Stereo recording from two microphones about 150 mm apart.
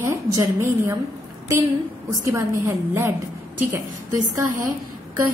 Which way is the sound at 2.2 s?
20° right (ahead or behind).